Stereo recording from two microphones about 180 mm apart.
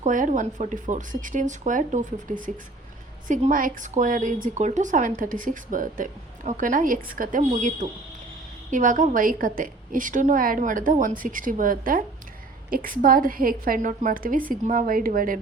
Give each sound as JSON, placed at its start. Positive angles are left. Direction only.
{"t": 0.0, "sound": "speech", "side_deg": -45}